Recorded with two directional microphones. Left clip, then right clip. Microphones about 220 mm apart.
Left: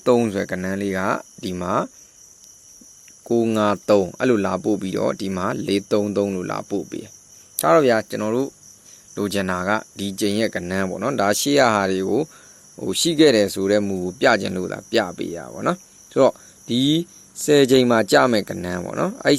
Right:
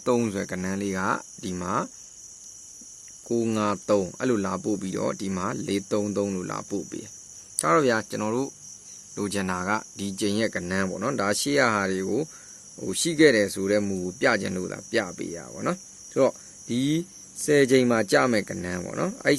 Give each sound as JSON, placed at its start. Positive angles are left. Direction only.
{"t": 0.0, "sound": "speech", "side_deg": 15}
{"t": 3.2, "sound": "speech", "side_deg": 15}